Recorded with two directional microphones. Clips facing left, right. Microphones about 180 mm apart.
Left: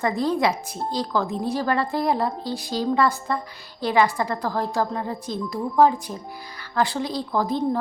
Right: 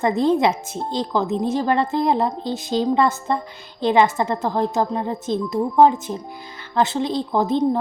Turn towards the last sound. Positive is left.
turn(degrees=-25)  # may be behind; listen again after turning